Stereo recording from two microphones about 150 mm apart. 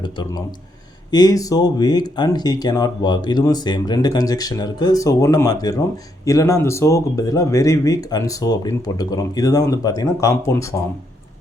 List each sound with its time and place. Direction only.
0.0 s speech: 30° left (ahead or behind)